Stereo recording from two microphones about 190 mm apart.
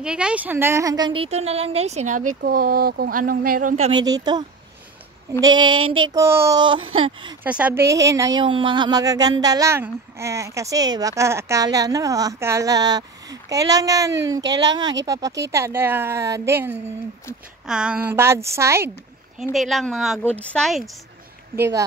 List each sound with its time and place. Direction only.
0.0 s a woman's voice: 5° right (ahead or behind); by 3.9 s 40° right (ahead or behind)
3.9 s a woman's voice: 20° right (ahead or behind)
5.8 s a sound: 90° right
6.1 s a woman's voice: 15° right (ahead or behind)
7.4 s a woman's voice: 5° right (ahead or behind)
19.5 s speech: centre (ahead or behind)